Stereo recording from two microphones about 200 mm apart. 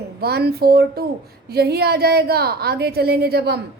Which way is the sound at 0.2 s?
55° right (ahead or behind).